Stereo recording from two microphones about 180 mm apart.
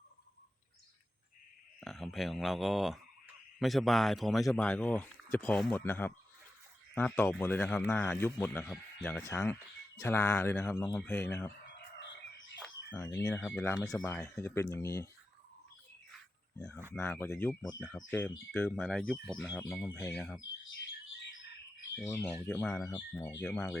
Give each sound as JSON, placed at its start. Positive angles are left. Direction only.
{"t": 1.8, "sound": "speech", "side_deg": 0}
{"t": 12.6, "sound": "chicken", "side_deg": 10}
{"t": 13.5, "sound": "speech", "side_deg": 10}
{"t": 16.1, "sound": "a sound", "side_deg": 5}
{"t": 16.9, "sound": "speech", "side_deg": 10}
{"t": 17.7, "sound": "speech", "side_deg": 5}
{"t": 22.4, "sound": "speech", "side_deg": 10}